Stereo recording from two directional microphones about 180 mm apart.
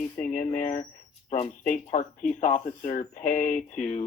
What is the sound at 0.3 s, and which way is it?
Speech, 45° left (ahead or behind).